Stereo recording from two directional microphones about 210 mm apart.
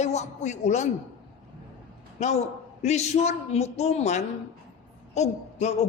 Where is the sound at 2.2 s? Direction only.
35° left (ahead or behind).